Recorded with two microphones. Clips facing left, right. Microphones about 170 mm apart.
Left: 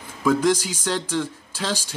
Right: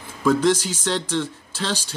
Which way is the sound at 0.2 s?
10° left (ahead or behind).